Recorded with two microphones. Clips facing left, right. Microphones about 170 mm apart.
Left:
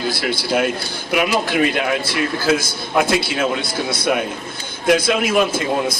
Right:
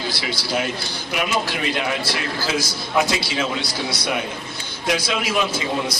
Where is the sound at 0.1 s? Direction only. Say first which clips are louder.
Left 6 dB; 55° left (ahead or behind).